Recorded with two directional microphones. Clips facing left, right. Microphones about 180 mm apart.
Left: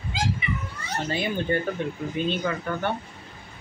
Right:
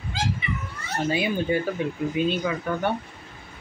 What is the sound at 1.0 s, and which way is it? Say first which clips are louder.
Speech: right 3 dB; 10° right (ahead or behind).